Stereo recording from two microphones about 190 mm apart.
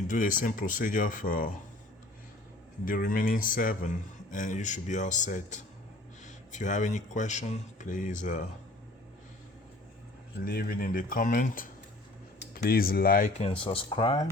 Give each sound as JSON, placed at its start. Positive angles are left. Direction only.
{"t": 0.1, "sound": "speech", "side_deg": 45}
{"t": 2.8, "sound": "speech", "side_deg": 45}
{"t": 10.4, "sound": "speech", "side_deg": 50}
{"t": 13.4, "sound": "speech", "side_deg": 25}